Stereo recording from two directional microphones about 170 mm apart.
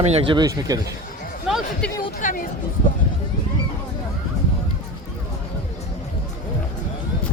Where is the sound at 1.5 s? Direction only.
Centre (ahead or behind).